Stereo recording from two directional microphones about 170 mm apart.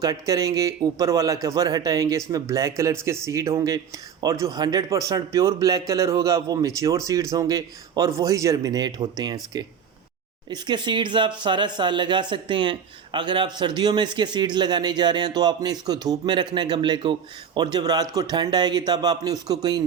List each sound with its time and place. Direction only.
0.0 s speech: 20° right (ahead or behind)